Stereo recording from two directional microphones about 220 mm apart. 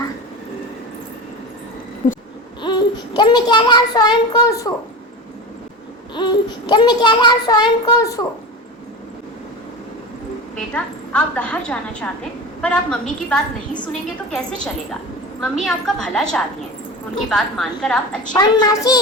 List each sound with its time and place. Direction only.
2.0 s a sound: 35° left (ahead or behind)
2.6 s a child's voice: 20° left (ahead or behind)
6.1 s a child's voice: 20° left (ahead or behind)
10.8 s a woman's voice: 5° left (ahead or behind)
18.3 s a child's voice: 15° left (ahead or behind)